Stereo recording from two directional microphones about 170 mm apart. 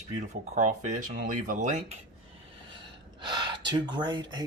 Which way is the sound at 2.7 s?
30° right (ahead or behind).